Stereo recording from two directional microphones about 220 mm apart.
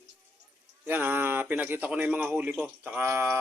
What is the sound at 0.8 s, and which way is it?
A man's voice, 10° right (ahead or behind).